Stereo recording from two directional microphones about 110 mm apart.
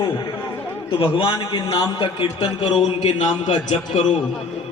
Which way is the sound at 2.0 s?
50° left (ahead or behind).